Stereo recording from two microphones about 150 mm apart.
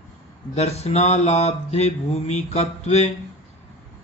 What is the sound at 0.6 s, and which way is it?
Mantra, 45° left (ahead or behind).